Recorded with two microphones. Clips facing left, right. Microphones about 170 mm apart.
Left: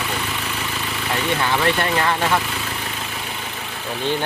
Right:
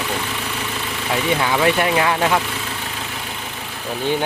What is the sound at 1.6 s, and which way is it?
Speech, 10° right (ahead or behind).